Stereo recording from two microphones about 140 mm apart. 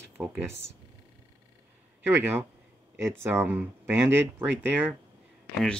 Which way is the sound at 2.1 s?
15° right (ahead or behind).